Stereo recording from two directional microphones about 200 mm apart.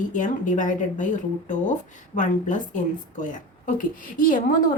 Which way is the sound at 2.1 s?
40° left (ahead or behind).